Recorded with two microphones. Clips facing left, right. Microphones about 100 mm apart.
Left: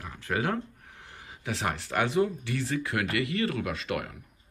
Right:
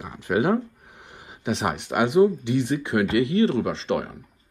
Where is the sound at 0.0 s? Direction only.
20° right (ahead or behind).